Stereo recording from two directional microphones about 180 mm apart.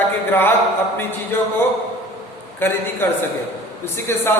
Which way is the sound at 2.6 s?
10° left (ahead or behind).